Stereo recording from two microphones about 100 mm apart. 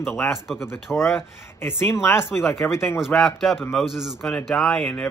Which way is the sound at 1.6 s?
25° left (ahead or behind).